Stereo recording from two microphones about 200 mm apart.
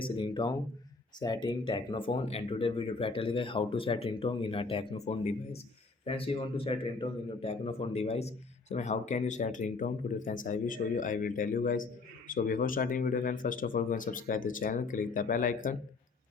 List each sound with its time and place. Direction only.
0.0 s speech: 25° left (ahead or behind); by 15.8 s 40° left (ahead or behind)